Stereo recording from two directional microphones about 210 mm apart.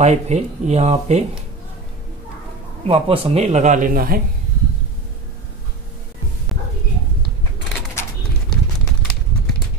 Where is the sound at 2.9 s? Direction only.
25° right (ahead or behind); by 4.2 s 45° right (ahead or behind).